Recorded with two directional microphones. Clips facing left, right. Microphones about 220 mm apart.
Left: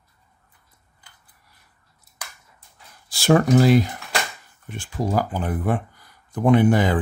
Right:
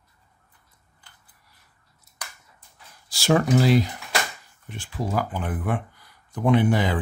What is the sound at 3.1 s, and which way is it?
Speech, 55° left (ahead or behind).